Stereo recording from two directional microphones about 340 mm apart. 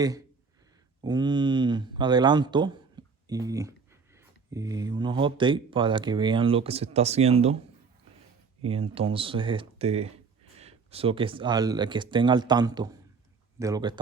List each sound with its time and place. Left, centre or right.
1.0 s speech: centre
8.6 s speech: centre